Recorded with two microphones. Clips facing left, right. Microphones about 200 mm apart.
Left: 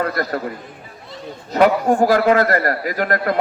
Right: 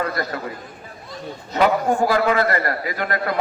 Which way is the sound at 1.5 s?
45° left (ahead or behind).